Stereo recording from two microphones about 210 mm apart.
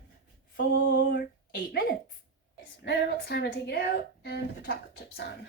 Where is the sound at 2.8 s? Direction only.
50° left (ahead or behind).